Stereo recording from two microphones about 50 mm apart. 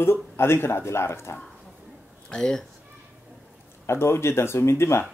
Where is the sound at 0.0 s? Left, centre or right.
Left.